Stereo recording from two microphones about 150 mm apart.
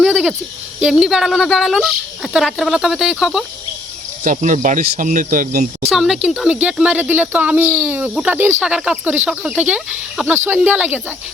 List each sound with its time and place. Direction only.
0.0 s cricket: centre (ahead or behind)
0.8 s speech: 5° right (ahead or behind)
4.2 s speech: 60° right (ahead or behind)
5.9 s speech: centre (ahead or behind)